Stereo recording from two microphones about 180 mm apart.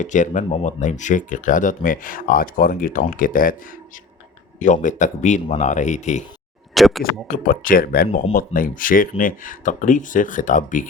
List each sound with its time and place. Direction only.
0.0 s speech: 45° left (ahead or behind)
6.7 s speech: centre (ahead or behind)
7.3 s speech: 50° left (ahead or behind)